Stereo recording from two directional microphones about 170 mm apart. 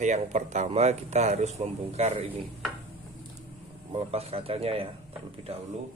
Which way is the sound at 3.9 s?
35° right (ahead or behind).